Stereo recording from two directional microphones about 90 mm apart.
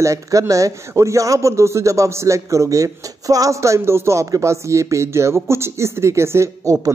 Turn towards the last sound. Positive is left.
turn(degrees=-35)  # may be behind; listen again after turning